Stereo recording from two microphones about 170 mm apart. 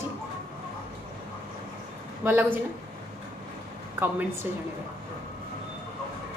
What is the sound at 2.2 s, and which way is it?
Speech, 10° right (ahead or behind).